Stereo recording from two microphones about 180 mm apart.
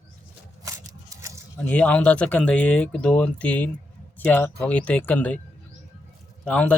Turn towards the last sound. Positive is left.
turn(degrees=5)  # may be behind; listen again after turning